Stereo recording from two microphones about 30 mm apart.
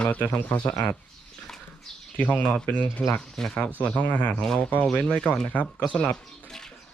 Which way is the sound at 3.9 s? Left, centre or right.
Left.